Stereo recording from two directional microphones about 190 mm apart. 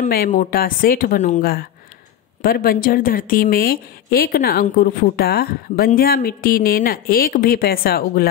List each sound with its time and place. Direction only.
0.0 s a woman's voice: 45° left (ahead or behind)